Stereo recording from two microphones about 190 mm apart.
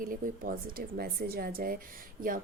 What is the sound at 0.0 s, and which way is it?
Speech, 45° right (ahead or behind).